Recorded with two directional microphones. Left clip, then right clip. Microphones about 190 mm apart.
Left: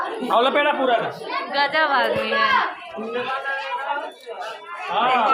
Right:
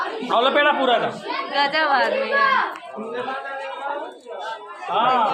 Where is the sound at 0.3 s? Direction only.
20° left (ahead or behind).